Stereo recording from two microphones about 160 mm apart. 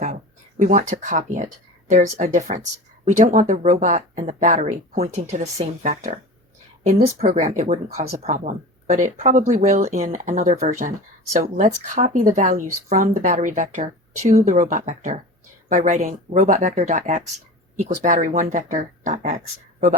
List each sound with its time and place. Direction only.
0.0 s a sound: 50° right (ahead or behind)
1.9 s speech: 50° right (ahead or behind)
7.3 s speech: 45° right (ahead or behind)